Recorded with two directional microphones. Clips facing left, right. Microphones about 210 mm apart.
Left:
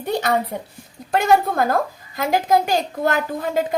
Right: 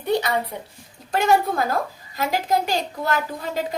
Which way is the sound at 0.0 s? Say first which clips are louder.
Left 1 dB; 50° left (ahead or behind).